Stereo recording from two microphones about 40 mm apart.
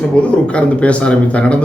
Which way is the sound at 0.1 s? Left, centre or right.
Left.